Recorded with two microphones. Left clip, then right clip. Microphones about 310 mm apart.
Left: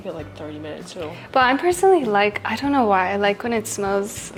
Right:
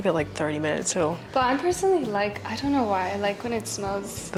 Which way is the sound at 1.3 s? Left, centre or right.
Left.